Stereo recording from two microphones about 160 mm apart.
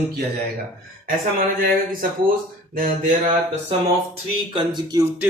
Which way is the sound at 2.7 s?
55° right (ahead or behind).